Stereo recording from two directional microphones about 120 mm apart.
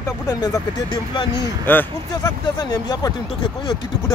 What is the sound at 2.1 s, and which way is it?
Speech, 35° left (ahead or behind).